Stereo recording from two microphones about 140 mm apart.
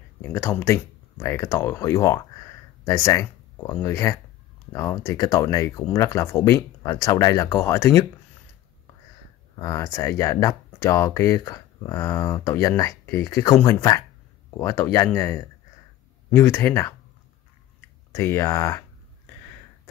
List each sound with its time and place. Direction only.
0.2 s speech: 15° left (ahead or behind)
9.6 s speech: 25° left (ahead or behind)
18.1 s speech: 20° left (ahead or behind)